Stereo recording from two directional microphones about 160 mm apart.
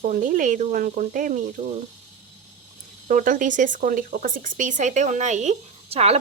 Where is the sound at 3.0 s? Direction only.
55° right (ahead or behind).